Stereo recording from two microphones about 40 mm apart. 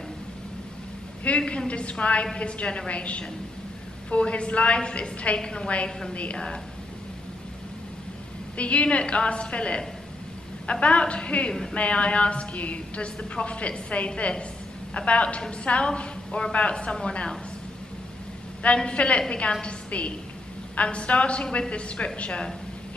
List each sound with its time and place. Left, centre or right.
1.4 s a woman's voice: centre
1.7 s a woman's voice: left
5.9 s a woman's voice: centre
6.1 s a woman's voice: left
8.5 s a woman's voice: left
18.6 s a woman's voice: left